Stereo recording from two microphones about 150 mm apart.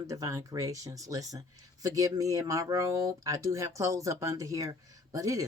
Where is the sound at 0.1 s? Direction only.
20° right (ahead or behind).